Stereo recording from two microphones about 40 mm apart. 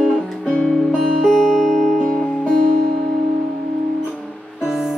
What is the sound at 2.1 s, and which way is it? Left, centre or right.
Music, centre.